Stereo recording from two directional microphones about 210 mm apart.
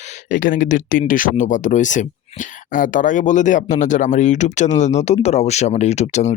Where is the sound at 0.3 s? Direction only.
40° left (ahead or behind).